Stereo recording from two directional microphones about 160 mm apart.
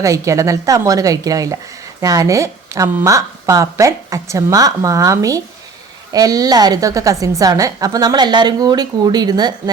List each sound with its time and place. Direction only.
0.0 s a woman's voice: 20° right (ahead or behind)